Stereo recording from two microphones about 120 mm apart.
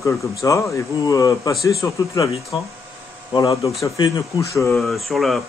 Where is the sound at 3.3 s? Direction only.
30° left (ahead or behind).